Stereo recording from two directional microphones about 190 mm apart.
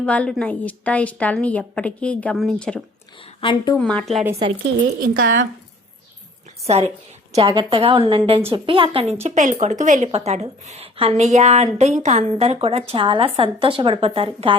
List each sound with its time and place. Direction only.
0.0 s a woman's voice: 5° left (ahead or behind)
3.4 s a woman's voice: 20° left (ahead or behind)
3.8 s a woman's voice: 5° left (ahead or behind)
4.9 s a woman's voice: 50° right (ahead or behind)
6.7 s a woman's voice: 35° right (ahead or behind)
9.2 s a woman's voice: 40° right (ahead or behind)